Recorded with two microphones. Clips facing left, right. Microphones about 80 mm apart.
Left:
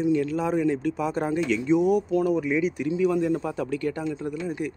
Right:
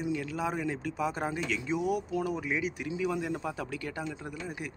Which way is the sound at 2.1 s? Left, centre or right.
Centre.